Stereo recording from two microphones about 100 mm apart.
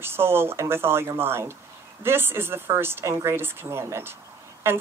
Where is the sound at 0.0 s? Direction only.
25° right (ahead or behind).